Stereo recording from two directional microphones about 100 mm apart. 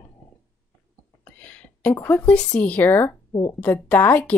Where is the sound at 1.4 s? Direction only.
15° left (ahead or behind).